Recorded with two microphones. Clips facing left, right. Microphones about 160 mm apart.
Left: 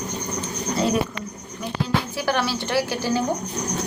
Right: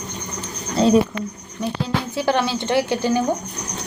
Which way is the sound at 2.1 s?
20° right (ahead or behind).